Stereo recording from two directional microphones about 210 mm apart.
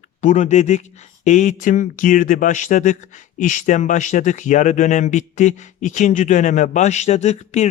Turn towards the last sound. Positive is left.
turn(degrees=30)  # may be behind; listen again after turning